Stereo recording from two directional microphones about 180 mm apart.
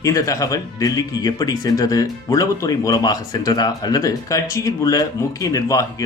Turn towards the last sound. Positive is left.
turn(degrees=20)  # may be behind; listen again after turning